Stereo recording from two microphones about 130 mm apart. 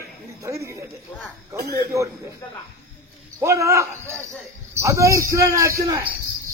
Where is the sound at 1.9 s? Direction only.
25° right (ahead or behind).